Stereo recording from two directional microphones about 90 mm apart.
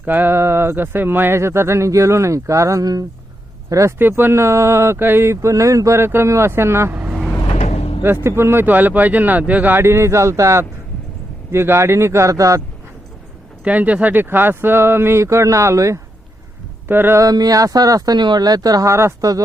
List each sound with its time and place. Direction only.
0.0 s speech: 20° right (ahead or behind); by 3.9 s 35° right (ahead or behind)
3.9 s speech: 25° right (ahead or behind)
7.4 s vehicle: 90° left
8.0 s speech: 25° right (ahead or behind)
13.7 s speech: 15° right (ahead or behind); by 16.0 s 35° right (ahead or behind)
16.9 s speech: 25° right (ahead or behind)
17.2 s speech: 45° right (ahead or behind)